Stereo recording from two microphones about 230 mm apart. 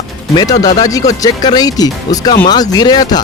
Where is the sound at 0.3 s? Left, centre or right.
Centre.